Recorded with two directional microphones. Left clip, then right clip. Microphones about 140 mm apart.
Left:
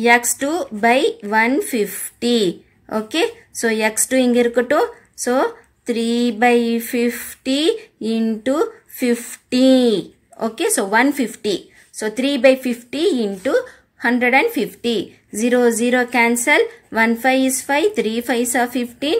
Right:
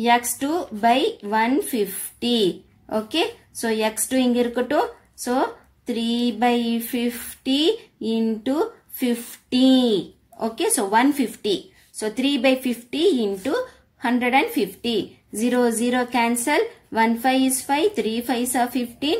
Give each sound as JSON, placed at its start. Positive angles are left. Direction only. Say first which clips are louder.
{"t": 0.0, "sound": "speech", "louder": "left 5 dB", "side_deg": 35}